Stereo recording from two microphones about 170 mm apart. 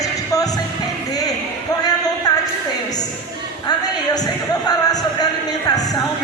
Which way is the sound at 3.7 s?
25° left (ahead or behind).